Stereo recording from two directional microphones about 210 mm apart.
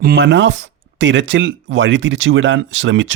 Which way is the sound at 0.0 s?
50° right (ahead or behind).